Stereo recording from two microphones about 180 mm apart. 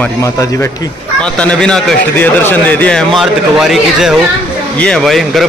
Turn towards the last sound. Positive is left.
turn(degrees=0)  # may be behind; listen again after turning